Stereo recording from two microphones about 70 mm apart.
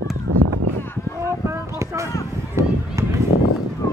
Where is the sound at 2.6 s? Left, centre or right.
Right.